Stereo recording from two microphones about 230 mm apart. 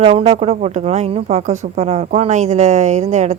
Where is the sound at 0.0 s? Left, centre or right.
Right.